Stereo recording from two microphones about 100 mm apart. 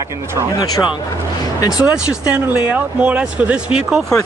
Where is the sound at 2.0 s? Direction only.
15° right (ahead or behind).